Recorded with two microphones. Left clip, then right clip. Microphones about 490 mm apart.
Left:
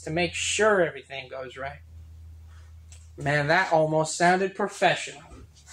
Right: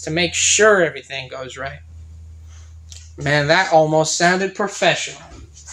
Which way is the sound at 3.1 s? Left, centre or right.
Left.